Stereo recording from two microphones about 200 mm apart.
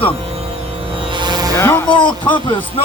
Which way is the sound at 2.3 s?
25° left (ahead or behind).